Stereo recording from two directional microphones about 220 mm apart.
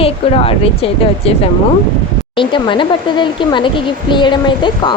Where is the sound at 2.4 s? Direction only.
20° left (ahead or behind).